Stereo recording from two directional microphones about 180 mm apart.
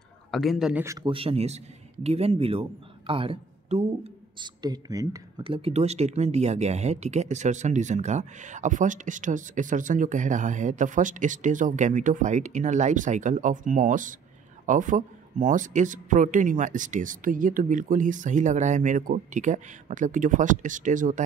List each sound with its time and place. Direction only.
0.3 s a man's voice: centre (ahead or behind)
0.8 s speech: 25° right (ahead or behind)
4.6 s speech: 20° right (ahead or behind); by 21.2 s 45° right (ahead or behind)